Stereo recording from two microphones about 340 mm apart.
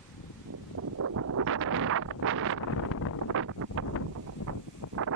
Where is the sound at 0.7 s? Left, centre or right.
Right.